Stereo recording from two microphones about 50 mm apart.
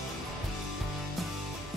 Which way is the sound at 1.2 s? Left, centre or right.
Centre.